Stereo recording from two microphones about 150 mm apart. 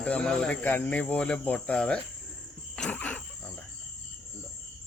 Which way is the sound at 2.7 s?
5° left (ahead or behind).